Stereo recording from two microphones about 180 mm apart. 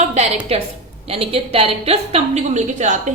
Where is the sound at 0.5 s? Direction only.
35° right (ahead or behind).